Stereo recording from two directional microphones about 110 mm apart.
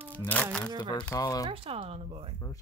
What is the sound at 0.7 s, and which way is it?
Speech, 40° left (ahead or behind).